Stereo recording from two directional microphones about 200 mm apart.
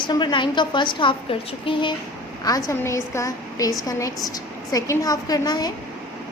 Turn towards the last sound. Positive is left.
turn(degrees=20)  # may be behind; listen again after turning